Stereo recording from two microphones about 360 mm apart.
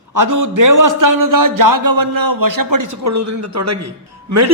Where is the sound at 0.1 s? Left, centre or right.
Right.